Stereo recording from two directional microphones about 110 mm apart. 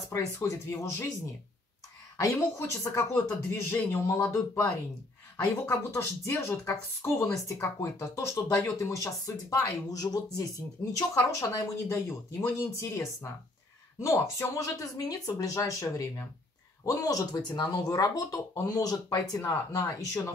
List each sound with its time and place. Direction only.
0.1 s speech: 25° left (ahead or behind)
2.1 s speech: 30° left (ahead or behind)